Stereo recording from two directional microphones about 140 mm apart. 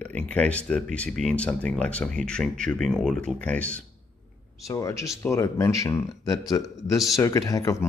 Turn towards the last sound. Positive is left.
turn(degrees=25)  # may be behind; listen again after turning